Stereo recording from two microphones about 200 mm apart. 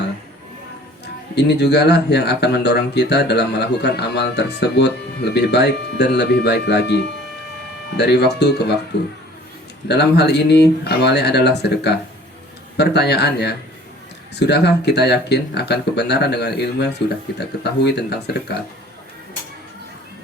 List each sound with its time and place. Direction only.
1.0 s speech: 55° left (ahead or behind)
9.9 s speech: 55° left (ahead or behind)